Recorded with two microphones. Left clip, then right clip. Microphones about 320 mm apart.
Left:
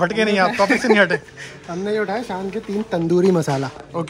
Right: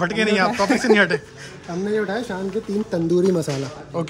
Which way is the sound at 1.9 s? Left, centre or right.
Centre.